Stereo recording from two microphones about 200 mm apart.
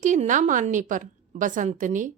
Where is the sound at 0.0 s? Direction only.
40° right (ahead or behind).